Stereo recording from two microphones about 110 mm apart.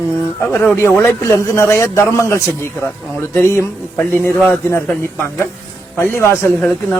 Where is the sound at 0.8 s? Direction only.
20° left (ahead or behind).